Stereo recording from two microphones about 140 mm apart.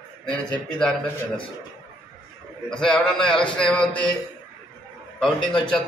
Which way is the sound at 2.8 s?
5° left (ahead or behind).